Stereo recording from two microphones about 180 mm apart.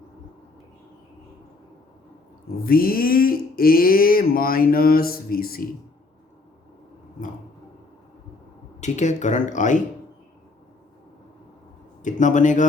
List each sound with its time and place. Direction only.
2.6 s a sound: 55° left (ahead or behind)
8.8 s speech: 40° left (ahead or behind)
12.0 s speech: 45° left (ahead or behind)